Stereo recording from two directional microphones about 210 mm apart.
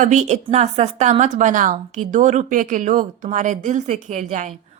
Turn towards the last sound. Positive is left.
turn(degrees=-35)  # may be behind; listen again after turning